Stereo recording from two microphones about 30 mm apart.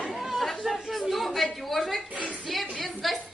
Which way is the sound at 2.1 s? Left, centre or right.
Right.